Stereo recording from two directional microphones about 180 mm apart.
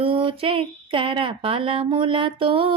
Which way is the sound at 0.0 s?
30° right (ahead or behind).